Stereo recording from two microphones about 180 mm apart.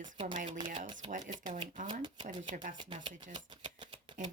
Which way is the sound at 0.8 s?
25° right (ahead or behind).